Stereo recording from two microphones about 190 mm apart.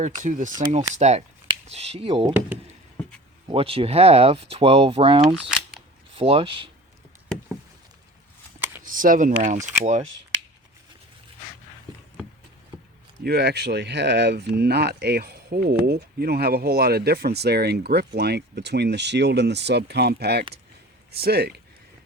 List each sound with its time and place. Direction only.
0.0 s speech: 40° right (ahead or behind); by 2.3 s 25° right (ahead or behind)
3.5 s speech: 30° right (ahead or behind)
8.5 s shuffling cards: 10° right (ahead or behind)
8.8 s speech: 45° right (ahead or behind)
13.2 s speech: 55° right (ahead or behind)